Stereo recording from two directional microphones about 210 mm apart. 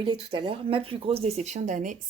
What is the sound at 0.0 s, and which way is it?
Speech, 25° right (ahead or behind).